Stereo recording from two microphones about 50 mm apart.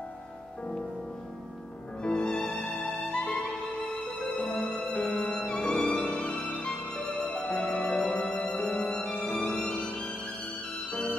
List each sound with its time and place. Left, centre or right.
2.0 s music: centre
3.8 s music: centre
5.0 s violin: left
7.2 s music: left
8.4 s violin: left